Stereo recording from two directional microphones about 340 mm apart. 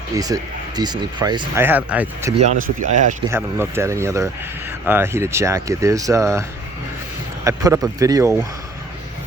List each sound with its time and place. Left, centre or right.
0.1 s speech: centre
2.3 s speech: right
3.2 s speech: centre
7.4 s speech: centre